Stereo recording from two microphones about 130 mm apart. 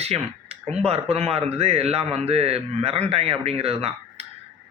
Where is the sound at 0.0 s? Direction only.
55° right (ahead or behind).